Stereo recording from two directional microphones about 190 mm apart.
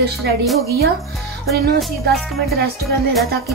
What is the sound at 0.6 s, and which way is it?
Music, 55° right (ahead or behind).